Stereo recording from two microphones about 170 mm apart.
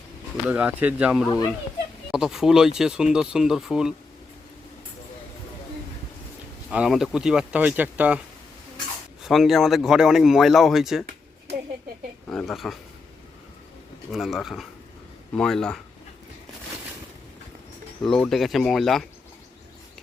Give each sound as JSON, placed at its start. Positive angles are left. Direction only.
{"t": 0.4, "sound": "speech", "side_deg": -10}
{"t": 1.3, "sound": "speech", "side_deg": 25}
{"t": 2.1, "sound": "speech", "side_deg": -5}
{"t": 6.7, "sound": "speech", "side_deg": -5}
{"t": 9.2, "sound": "speech", "side_deg": 0}
{"t": 12.3, "sound": "speech", "side_deg": 0}
{"t": 14.1, "sound": "speech", "side_deg": 0}
{"t": 18.0, "sound": "speech", "side_deg": 5}